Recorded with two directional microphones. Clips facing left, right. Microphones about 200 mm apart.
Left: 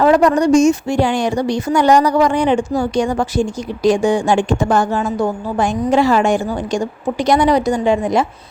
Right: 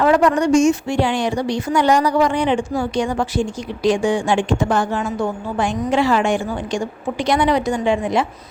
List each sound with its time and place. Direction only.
0.0 s a woman's voice: 35° left (ahead or behind)